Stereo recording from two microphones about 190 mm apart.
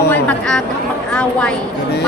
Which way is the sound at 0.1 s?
5° left (ahead or behind).